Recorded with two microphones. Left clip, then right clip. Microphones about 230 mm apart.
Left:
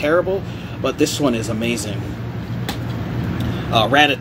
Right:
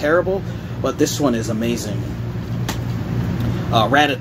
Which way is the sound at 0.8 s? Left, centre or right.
Centre.